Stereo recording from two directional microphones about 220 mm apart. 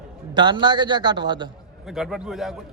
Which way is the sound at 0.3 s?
20° right (ahead or behind).